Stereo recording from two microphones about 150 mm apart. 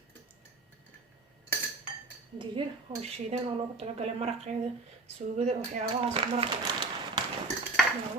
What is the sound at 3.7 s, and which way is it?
Speech, 45° right (ahead or behind).